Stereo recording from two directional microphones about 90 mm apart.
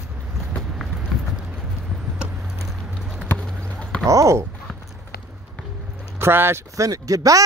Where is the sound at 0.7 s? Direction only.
10° right (ahead or behind).